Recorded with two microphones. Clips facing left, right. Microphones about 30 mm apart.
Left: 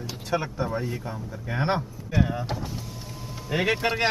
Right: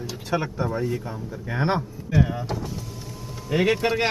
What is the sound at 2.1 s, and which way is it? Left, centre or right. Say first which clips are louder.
Speech: right 3 dB; centre.